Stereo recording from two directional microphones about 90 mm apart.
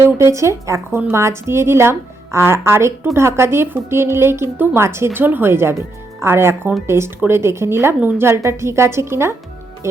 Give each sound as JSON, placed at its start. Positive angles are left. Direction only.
{"t": 0.0, "sound": "speech", "side_deg": -30}